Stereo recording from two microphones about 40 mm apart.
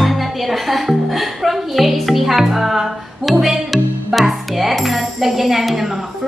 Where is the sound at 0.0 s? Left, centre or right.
Centre.